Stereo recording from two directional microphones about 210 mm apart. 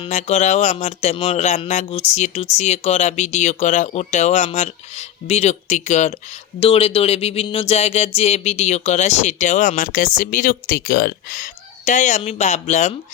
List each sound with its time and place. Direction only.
0.0 s speech: 35° left (ahead or behind)